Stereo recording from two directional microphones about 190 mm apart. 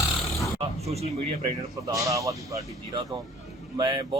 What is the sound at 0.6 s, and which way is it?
Speech, 35° right (ahead or behind).